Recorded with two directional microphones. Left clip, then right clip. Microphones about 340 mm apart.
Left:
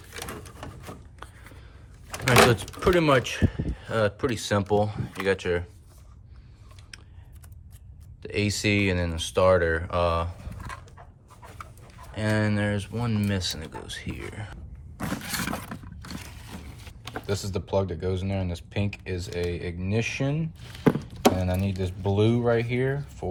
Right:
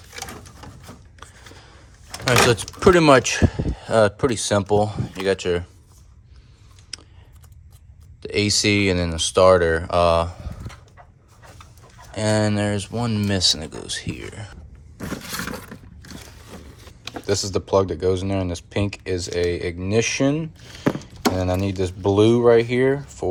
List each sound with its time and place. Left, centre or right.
1.2 s a sound: centre
2.2 s a sound: centre
2.8 s speech: centre
6.9 s typing: centre
8.2 s speech: centre
12.1 s speech: centre
17.2 s speech: right